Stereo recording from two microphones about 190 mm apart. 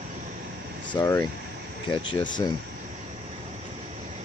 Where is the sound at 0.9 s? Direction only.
15° left (ahead or behind).